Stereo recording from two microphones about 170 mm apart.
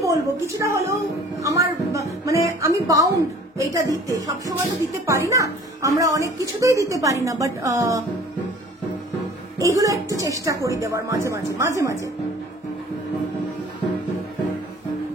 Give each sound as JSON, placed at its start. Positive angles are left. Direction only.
{"t": 0.0, "sound": "a woman's voice", "side_deg": -20}
{"t": 9.6, "sound": "speech", "side_deg": -20}